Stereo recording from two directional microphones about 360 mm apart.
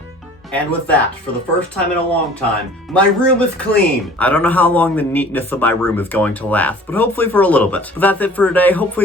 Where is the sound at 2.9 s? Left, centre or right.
Centre.